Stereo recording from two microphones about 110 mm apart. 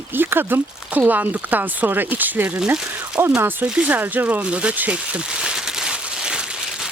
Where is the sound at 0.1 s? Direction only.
20° right (ahead or behind).